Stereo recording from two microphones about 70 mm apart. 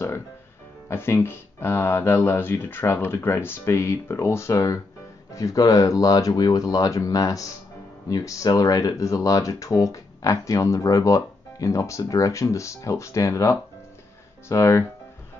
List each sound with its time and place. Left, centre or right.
0.8 s speech: left